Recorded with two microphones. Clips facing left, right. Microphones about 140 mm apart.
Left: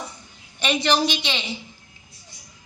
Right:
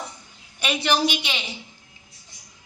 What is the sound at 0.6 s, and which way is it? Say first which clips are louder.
Speech: left 1 dB; 5° right (ahead or behind).